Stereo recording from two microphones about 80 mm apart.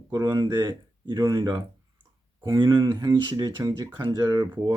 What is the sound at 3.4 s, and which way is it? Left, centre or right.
Speech, right.